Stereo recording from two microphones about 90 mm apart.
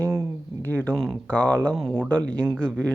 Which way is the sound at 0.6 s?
20° left (ahead or behind).